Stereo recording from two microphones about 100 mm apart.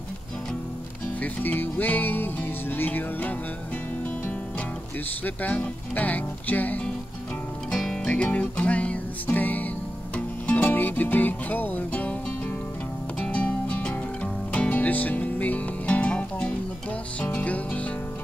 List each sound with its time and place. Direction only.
1.2 s music: 20° left (ahead or behind)
5.2 s music: 15° left (ahead or behind)
7.7 s music: 5° left (ahead or behind)